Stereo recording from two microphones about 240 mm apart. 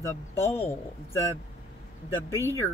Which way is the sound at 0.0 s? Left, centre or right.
Centre.